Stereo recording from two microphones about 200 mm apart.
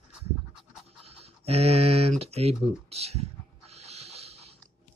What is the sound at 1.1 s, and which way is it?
Speech, 30° right (ahead or behind).